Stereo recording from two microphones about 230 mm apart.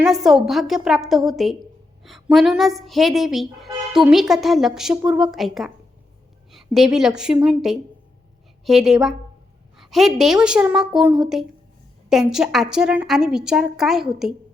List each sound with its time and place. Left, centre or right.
0.0 s a woman's voice: centre